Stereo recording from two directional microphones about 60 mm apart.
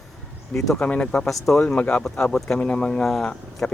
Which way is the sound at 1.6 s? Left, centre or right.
Centre.